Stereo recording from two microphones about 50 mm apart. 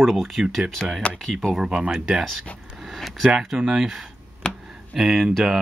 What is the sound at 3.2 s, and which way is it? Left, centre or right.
Speech, centre.